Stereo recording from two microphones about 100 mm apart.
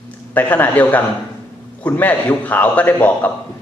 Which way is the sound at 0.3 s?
20° left (ahead or behind).